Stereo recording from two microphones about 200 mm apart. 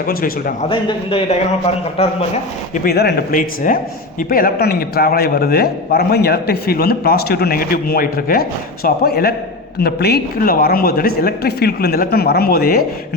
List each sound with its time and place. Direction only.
0.0 s speech: 45° left (ahead or behind)
0.7 s a man's voice: 25° left (ahead or behind)
2.8 s speech: 55° left (ahead or behind)